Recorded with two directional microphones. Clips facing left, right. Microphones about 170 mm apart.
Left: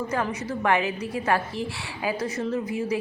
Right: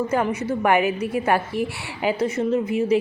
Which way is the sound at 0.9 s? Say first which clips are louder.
Right 6 dB; 65° right (ahead or behind).